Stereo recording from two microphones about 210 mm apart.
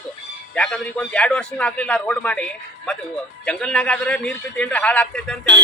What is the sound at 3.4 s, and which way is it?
Speech, 5° left (ahead or behind).